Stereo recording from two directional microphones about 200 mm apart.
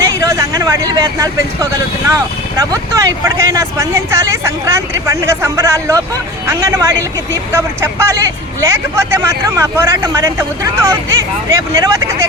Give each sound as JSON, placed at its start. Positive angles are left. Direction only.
{"t": 0.0, "sound": "vehicle", "side_deg": -15}
{"t": 2.0, "sound": "speech", "side_deg": -15}